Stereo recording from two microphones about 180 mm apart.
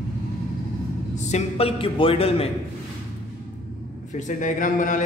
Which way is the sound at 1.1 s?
35° left (ahead or behind).